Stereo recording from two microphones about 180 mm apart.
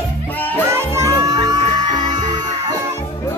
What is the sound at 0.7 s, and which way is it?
Music, 15° right (ahead or behind).